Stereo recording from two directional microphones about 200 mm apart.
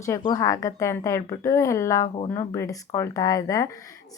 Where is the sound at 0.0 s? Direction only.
15° left (ahead or behind).